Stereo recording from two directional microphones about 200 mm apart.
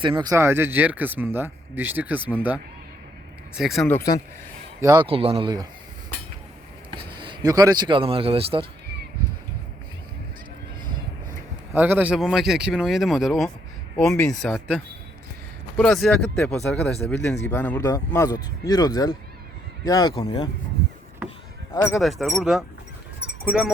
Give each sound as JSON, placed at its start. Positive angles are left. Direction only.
{"t": 0.0, "sound": "speech", "side_deg": -25}
{"t": 3.5, "sound": "speech", "side_deg": 0}
{"t": 4.8, "sound": "speech", "side_deg": -20}
{"t": 7.2, "sound": "speech", "side_deg": -20}
{"t": 11.7, "sound": "speech", "side_deg": -10}
{"t": 15.8, "sound": "speech", "side_deg": 0}
{"t": 17.2, "sound": "speech", "side_deg": 60}
{"t": 17.5, "sound": "speech", "side_deg": 10}
{"t": 21.7, "sound": "speech", "side_deg": 15}
{"t": 22.0, "sound": "speech", "side_deg": 0}